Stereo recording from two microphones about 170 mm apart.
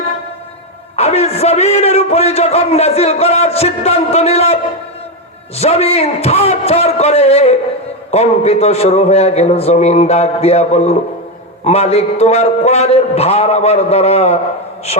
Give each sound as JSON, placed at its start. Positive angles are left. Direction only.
{"t": 0.9, "sound": "a man's voice", "side_deg": 40}